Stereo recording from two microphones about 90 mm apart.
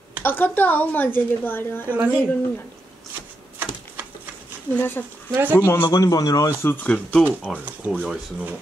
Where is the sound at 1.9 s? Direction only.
15° right (ahead or behind).